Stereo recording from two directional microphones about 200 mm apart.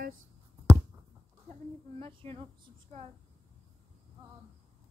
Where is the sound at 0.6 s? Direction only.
15° right (ahead or behind).